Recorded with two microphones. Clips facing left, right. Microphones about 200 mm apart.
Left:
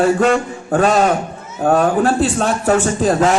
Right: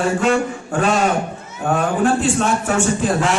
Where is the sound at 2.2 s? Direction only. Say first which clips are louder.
Left 2 dB; 35° left (ahead or behind).